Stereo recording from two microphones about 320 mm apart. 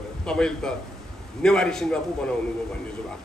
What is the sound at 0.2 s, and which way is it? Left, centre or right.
A man's voice, centre.